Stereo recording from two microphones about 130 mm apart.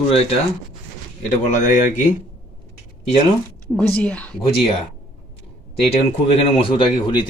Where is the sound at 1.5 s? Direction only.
90° left.